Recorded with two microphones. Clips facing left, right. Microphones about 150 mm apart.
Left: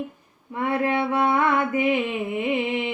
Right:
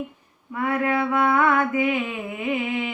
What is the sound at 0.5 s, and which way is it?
Mantra, 25° left (ahead or behind).